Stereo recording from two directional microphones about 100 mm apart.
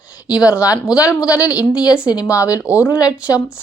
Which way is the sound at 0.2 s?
35° left (ahead or behind).